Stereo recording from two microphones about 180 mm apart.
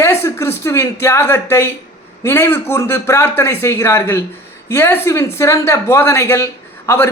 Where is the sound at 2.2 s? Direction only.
15° left (ahead or behind).